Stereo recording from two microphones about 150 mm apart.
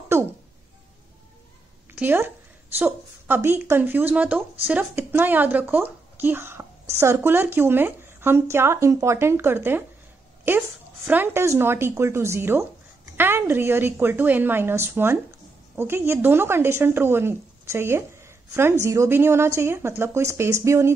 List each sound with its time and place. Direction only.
0.1 s a sound: 15° right (ahead or behind)
2.0 s speech: 15° right (ahead or behind)
11.1 s speech: 15° right (ahead or behind)